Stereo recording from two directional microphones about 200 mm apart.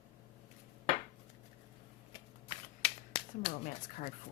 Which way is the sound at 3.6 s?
40° left (ahead or behind).